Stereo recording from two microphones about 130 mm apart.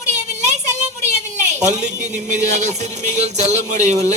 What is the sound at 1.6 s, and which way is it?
Speech, 65° right (ahead or behind).